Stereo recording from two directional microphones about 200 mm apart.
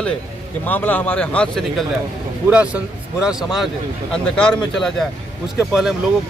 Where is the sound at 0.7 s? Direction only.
10° left (ahead or behind).